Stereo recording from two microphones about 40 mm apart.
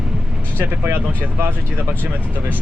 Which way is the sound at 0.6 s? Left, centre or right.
Right.